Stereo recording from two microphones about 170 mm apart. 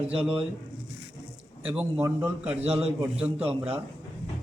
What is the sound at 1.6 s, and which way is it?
Mantra, 10° right (ahead or behind).